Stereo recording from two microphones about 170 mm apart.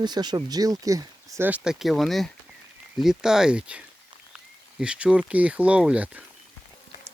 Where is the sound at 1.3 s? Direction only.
10° right (ahead or behind).